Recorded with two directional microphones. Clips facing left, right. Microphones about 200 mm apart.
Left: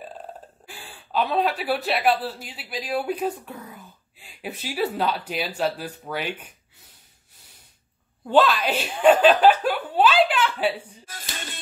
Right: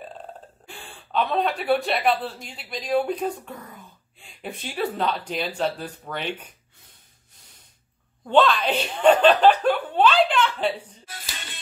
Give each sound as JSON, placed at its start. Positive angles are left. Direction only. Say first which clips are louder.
{"t": 0.7, "sound": "speech", "louder": "right 2 dB", "side_deg": 5}
{"t": 8.3, "sound": "speech", "louder": "even", "side_deg": 5}
{"t": 11.1, "sound": "music", "louder": "left 3 dB", "side_deg": 45}